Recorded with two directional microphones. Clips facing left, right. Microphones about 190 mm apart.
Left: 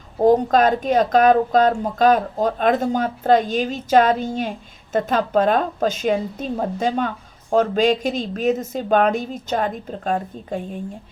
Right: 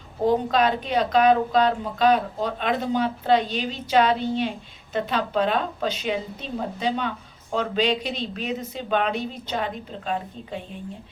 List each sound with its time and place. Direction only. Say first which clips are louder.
0.3 s speech: left 6 dB; 45° left (ahead or behind)